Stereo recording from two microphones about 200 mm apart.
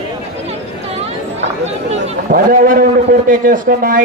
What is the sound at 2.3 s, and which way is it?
A man's voice, 45° right (ahead or behind).